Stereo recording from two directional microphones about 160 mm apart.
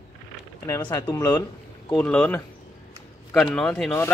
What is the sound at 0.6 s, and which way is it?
Speech, 20° left (ahead or behind).